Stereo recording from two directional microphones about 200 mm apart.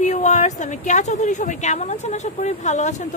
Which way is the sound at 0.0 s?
35° left (ahead or behind).